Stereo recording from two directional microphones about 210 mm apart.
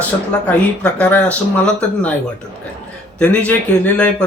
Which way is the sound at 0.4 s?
5° left (ahead or behind).